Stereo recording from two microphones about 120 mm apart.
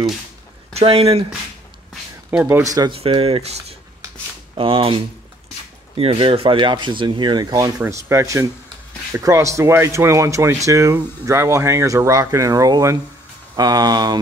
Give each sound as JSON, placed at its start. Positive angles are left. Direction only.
{"t": 0.7, "sound": "speech", "side_deg": -55}
{"t": 2.3, "sound": "speech", "side_deg": -15}
{"t": 2.9, "sound": "speech", "side_deg": -50}